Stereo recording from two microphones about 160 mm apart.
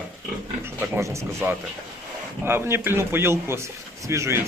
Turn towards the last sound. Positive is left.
turn(degrees=-15)  # may be behind; listen again after turning